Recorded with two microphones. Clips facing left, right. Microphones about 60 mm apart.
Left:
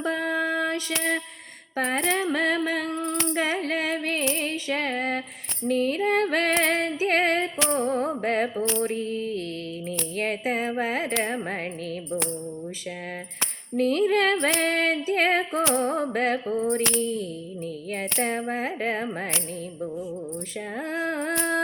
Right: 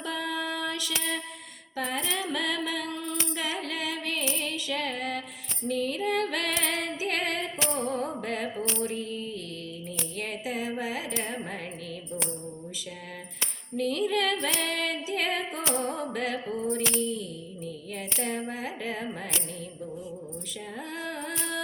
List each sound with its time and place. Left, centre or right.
0.0 s a sound: left
1.7 s female singing: left
3.3 s singing: left
4.2 s female singing: left
4.4 s music: left
5.6 s female singing: left
7.7 s music: left
8.2 s mantra: left
10.2 s music: left
13.7 s a sound: left
14.4 s female singing: left
15.7 s music: left
16.1 s a sound: left
20.9 s a sound: left